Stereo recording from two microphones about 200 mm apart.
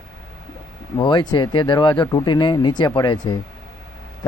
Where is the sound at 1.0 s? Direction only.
20° left (ahead or behind).